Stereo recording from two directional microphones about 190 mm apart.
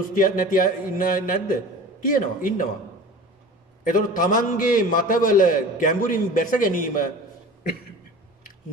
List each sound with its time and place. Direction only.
0.1 s a man's voice: 45° left (ahead or behind)
3.8 s a man's voice: 45° left (ahead or behind)